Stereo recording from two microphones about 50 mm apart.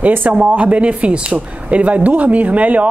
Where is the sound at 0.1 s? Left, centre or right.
Right.